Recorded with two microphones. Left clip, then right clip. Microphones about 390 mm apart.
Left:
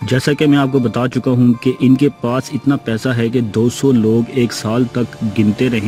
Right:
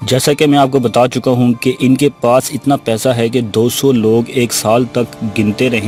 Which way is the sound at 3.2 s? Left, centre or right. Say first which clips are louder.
Right 3 dB; centre.